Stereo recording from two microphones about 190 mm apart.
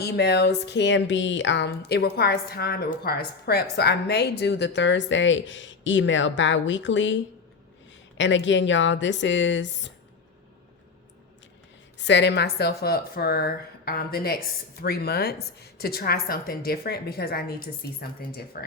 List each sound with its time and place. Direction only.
0.0 s speech: 60° left (ahead or behind)
8.2 s speech: 75° left (ahead or behind)
11.9 s a woman's voice: 65° left (ahead or behind)